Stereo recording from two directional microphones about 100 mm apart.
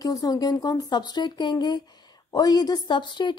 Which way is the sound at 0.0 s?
35° left (ahead or behind).